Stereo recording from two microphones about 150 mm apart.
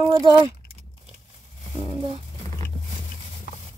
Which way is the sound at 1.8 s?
35° right (ahead or behind).